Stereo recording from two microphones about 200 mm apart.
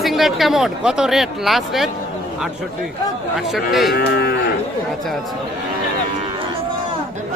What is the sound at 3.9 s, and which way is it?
Cattle, 55° left (ahead or behind).